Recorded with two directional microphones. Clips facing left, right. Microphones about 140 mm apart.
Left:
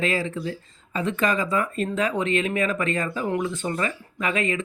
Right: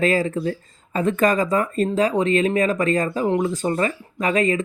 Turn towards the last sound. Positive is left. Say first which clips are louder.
# right 5 dB
turn(degrees=-40)  # may be behind; listen again after turning